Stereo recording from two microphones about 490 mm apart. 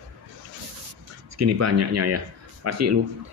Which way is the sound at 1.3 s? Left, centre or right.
Right.